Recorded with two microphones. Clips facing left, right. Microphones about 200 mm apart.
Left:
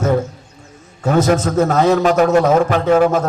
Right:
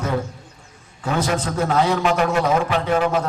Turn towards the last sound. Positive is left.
turn(degrees=45)  # may be behind; listen again after turning